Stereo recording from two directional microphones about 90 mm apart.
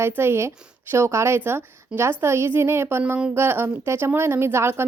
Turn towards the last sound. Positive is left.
turn(degrees=-25)  # may be behind; listen again after turning